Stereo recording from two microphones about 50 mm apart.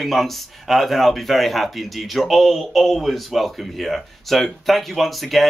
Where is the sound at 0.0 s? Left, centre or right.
Centre.